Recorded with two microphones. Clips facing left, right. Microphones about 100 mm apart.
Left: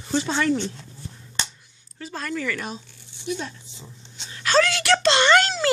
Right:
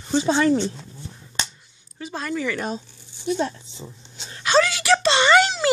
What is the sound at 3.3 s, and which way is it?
Speech, 30° right (ahead or behind).